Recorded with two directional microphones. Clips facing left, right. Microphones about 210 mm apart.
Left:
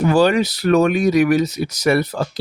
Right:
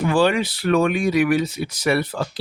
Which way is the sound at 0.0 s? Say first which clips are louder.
Left 4 dB; 40° left (ahead or behind).